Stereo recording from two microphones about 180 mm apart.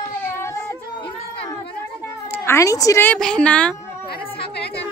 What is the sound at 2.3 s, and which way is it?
Speech, 15° left (ahead or behind).